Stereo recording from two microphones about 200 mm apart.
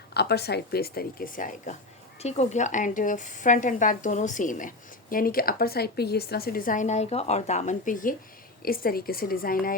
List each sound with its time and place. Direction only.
0.1 s speech: 55° left (ahead or behind)